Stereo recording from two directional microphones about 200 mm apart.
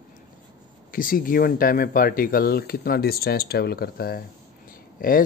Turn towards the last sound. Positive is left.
turn(degrees=45)  # may be behind; listen again after turning